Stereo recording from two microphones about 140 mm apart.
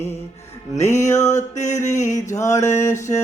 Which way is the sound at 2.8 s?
60° left (ahead or behind).